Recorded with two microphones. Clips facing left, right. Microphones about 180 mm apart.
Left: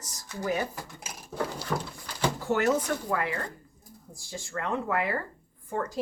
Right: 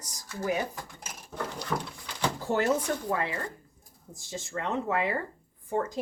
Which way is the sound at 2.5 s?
30° right (ahead or behind).